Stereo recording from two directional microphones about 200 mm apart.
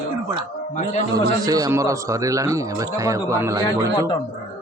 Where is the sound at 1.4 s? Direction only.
15° right (ahead or behind).